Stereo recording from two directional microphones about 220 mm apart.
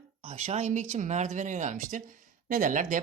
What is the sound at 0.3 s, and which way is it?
Speech, 30° right (ahead or behind).